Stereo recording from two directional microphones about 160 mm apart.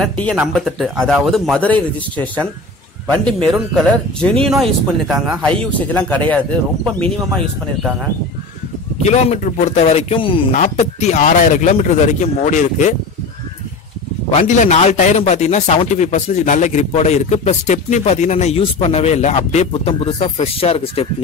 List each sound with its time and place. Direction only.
0.0 s a man's voice: 5° left (ahead or behind)
9.0 s speech: 45° left (ahead or behind)
10.5 s speech: 45° left (ahead or behind)
14.3 s speech: 50° left (ahead or behind)